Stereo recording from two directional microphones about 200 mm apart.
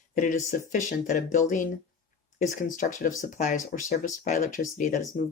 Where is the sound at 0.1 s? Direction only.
40° left (ahead or behind).